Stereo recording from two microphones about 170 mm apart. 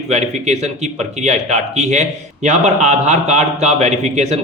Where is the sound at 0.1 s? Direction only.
40° right (ahead or behind).